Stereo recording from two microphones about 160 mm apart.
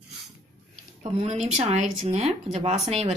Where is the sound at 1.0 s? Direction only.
45° right (ahead or behind).